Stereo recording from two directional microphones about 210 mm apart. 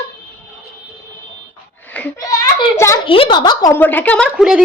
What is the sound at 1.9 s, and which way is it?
A woman's voice, 10° left (ahead or behind).